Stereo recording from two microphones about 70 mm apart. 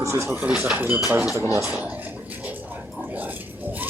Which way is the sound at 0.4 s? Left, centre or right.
Centre.